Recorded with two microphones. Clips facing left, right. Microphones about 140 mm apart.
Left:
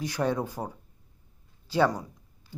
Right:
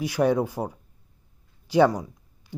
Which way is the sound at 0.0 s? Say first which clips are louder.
Right 6 dB; 10° right (ahead or behind).